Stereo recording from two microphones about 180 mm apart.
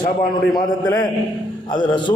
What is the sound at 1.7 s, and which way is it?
Speech, 25° left (ahead or behind).